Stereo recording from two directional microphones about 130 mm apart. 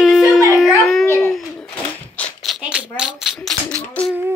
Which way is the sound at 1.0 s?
20° left (ahead or behind).